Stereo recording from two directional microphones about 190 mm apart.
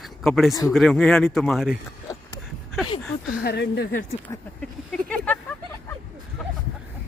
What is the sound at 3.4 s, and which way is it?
Speech, 60° left (ahead or behind).